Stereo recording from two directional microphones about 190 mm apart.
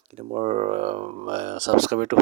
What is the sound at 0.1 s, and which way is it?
Speech, 35° right (ahead or behind).